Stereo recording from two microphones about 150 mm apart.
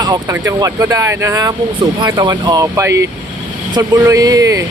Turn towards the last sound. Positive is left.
turn(degrees=-20)  # may be behind; listen again after turning